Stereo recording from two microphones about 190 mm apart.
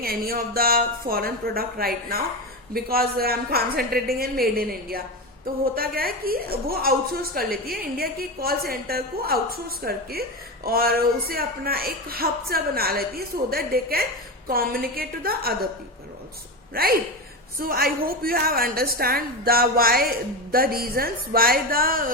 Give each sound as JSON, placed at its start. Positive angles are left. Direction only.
{"t": 0.0, "sound": "a woman's voice", "side_deg": -50}
{"t": 16.7, "sound": "a woman's voice", "side_deg": -55}